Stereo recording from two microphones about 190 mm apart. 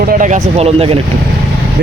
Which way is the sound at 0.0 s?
45° right (ahead or behind).